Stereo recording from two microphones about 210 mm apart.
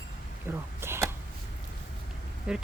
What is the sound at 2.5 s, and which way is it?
Speech, 5° right (ahead or behind).